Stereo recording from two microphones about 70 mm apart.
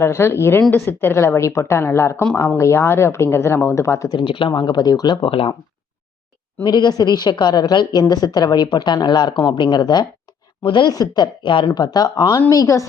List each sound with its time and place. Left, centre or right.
0.0 s a woman's voice: left
4.6 s a woman's voice: left
6.7 s a woman's voice: left
10.8 s speech: left
12.0 s a woman's voice: left